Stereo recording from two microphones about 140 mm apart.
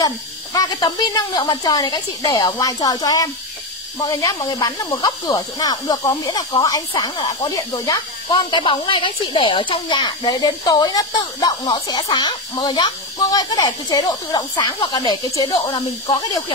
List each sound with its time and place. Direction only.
0.0 s speech: 25° left (ahead or behind)